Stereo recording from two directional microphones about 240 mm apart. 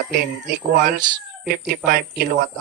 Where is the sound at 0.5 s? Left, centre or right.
Right.